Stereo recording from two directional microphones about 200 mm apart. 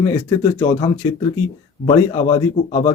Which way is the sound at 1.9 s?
20° left (ahead or behind).